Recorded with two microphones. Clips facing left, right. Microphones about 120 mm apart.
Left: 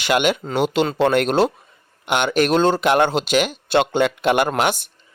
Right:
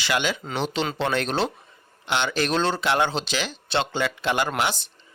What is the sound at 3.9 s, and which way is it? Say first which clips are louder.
Speech: left 7 dB; 15° left (ahead or behind).